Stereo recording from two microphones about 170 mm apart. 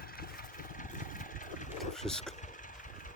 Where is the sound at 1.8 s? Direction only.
5° left (ahead or behind).